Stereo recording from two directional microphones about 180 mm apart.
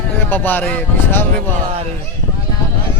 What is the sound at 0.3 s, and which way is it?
Speech, 10° left (ahead or behind).